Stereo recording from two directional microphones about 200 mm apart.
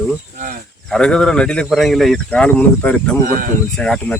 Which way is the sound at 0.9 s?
5° left (ahead or behind).